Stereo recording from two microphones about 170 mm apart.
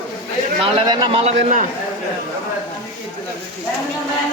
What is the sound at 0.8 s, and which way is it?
Speech, 30° right (ahead or behind).